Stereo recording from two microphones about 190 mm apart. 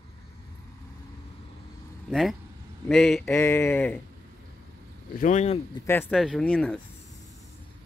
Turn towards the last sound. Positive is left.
turn(degrees=5)  # may be behind; listen again after turning